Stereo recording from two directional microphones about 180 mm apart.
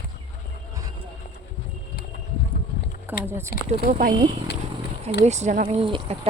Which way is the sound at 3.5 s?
55° left (ahead or behind).